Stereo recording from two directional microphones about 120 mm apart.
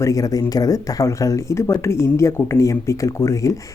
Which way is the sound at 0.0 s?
30° left (ahead or behind).